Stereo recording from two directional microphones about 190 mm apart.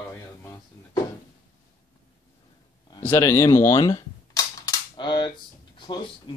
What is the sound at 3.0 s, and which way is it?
Cap gun, 10° left (ahead or behind).